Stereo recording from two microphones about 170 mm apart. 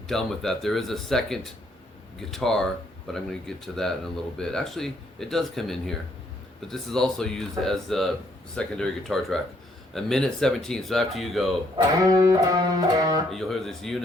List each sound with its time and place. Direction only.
0.1 s speech: centre (ahead or behind)
12.0 s music: 20° right (ahead or behind)
13.3 s speech: centre (ahead or behind)